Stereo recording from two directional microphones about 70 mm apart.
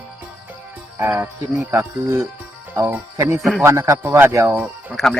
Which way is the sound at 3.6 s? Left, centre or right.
Right.